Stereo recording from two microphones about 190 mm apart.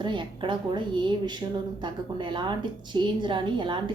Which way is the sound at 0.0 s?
25° right (ahead or behind).